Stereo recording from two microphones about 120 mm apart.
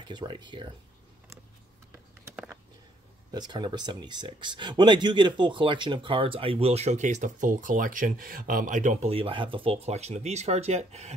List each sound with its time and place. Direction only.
0.1 s speech: 40° right (ahead or behind)
3.3 s speech: 35° right (ahead or behind); by 9.1 s 90° right
9.1 s speech: 50° right (ahead or behind); by 11.1 s 65° right (ahead or behind)